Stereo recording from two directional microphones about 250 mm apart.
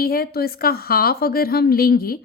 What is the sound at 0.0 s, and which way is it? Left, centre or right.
Speech, left.